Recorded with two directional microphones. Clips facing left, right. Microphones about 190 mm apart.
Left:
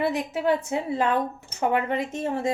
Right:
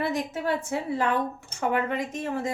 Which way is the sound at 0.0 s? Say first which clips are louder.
Left 3 dB; 20° left (ahead or behind).